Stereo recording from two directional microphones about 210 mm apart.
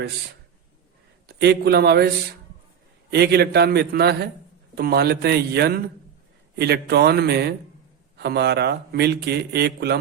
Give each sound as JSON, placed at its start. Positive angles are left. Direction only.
{"t": 1.3, "sound": "speech", "side_deg": -50}
{"t": 3.1, "sound": "speech", "side_deg": -50}